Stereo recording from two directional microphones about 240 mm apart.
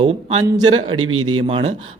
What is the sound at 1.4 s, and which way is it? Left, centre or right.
Speech, right.